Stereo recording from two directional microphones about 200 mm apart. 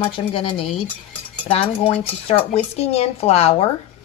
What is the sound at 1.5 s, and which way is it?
Speech, 25° left (ahead or behind).